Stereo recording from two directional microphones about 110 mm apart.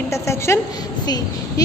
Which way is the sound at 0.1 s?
25° left (ahead or behind).